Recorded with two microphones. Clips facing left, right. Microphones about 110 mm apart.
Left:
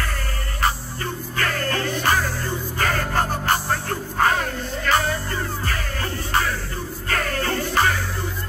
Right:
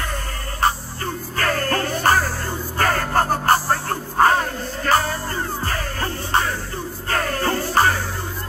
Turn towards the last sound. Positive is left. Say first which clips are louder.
# right 3 dB
turn(degrees=-35)  # may be behind; listen again after turning